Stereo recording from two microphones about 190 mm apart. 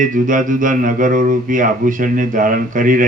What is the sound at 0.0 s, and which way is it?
Speech, 45° right (ahead or behind).